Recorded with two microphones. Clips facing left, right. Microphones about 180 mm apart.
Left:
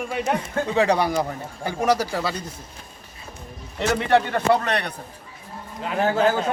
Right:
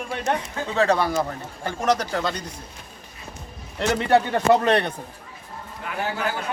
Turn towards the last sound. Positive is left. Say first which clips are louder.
# left 7 dB
turn(degrees=25)  # may be behind; listen again after turning